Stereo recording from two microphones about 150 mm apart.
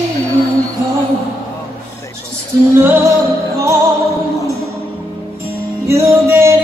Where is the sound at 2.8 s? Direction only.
15° right (ahead or behind).